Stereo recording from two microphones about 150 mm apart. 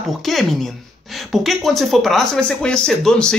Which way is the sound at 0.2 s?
Centre (ahead or behind).